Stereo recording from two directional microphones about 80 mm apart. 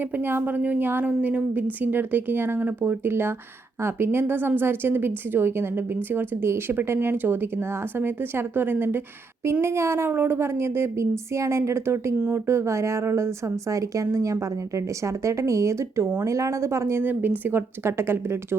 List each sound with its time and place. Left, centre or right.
0.0 s a woman's voice: right
17.0 s a woman's voice: right